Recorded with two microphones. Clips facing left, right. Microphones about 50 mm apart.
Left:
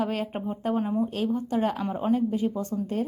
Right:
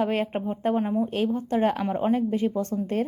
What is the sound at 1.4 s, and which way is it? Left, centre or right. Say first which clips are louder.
A woman's voice: right 3 dB; right.